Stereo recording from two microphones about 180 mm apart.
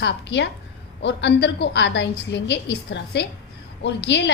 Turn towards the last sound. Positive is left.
turn(degrees=70)  # may be behind; listen again after turning